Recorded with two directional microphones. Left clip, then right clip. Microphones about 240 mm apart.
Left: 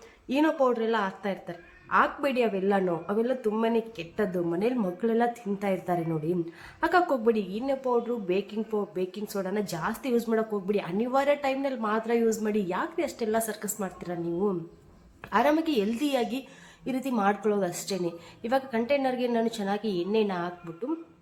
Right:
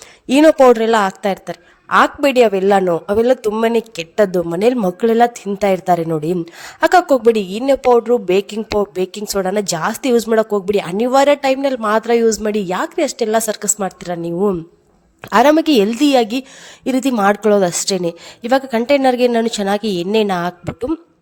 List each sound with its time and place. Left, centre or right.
0.3 s a woman's voice: right